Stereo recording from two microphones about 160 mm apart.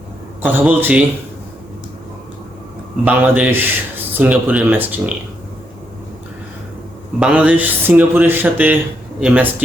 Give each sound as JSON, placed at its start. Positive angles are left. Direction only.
{"t": 0.4, "sound": "a man's voice", "side_deg": -10}
{"t": 3.0, "sound": "a man's voice", "side_deg": -10}
{"t": 7.2, "sound": "a man's voice", "side_deg": -10}